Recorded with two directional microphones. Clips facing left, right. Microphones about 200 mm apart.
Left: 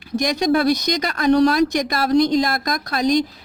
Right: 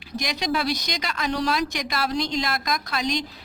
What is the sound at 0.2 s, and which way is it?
Speech, 50° left (ahead or behind).